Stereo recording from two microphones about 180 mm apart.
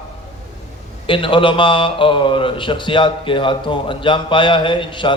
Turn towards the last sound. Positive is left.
turn(degrees=25)  # may be behind; listen again after turning